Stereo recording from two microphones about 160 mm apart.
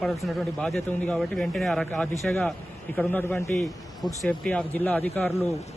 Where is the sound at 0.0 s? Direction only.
Centre (ahead or behind).